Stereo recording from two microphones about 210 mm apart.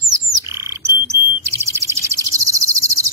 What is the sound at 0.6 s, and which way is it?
Frog, 15° right (ahead or behind).